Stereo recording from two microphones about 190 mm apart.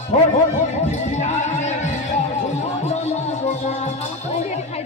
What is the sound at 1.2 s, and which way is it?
Music, 35° left (ahead or behind).